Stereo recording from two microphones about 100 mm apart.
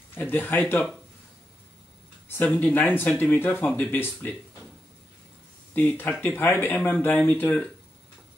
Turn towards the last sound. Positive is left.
turn(degrees=15)  # may be behind; listen again after turning